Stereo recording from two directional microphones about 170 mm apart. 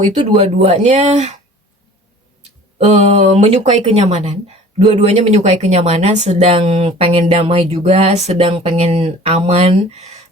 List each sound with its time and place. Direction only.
0.0 s speech: 40° right (ahead or behind)
2.7 s speech: 40° right (ahead or behind)